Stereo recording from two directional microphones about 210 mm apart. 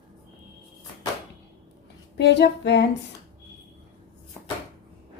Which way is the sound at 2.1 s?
55° left (ahead or behind).